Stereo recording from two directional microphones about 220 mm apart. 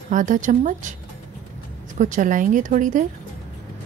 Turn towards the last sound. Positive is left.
turn(degrees=-35)  # may be behind; listen again after turning